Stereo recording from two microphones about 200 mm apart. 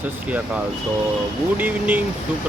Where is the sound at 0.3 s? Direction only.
5° right (ahead or behind).